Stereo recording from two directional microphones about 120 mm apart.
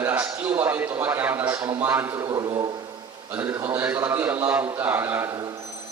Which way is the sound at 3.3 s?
15° right (ahead or behind).